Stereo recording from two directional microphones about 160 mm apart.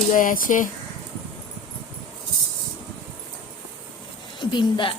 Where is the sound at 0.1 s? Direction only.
55° left (ahead or behind).